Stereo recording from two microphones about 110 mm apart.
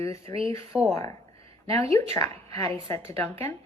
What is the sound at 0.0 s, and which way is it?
Speech, 25° left (ahead or behind).